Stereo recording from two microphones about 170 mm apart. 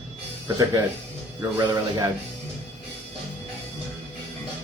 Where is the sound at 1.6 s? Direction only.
25° right (ahead or behind).